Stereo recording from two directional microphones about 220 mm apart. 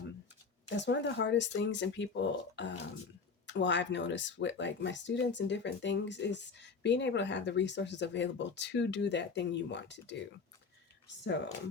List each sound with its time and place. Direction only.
0.7 s speech: 55° left (ahead or behind)